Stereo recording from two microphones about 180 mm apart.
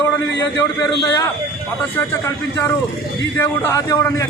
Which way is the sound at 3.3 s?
15° left (ahead or behind).